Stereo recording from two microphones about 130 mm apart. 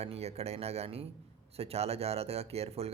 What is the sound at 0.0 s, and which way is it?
Speech, 55° right (ahead or behind).